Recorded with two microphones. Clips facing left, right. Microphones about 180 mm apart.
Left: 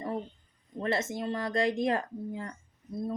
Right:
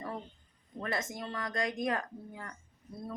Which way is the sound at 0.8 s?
25° left (ahead or behind).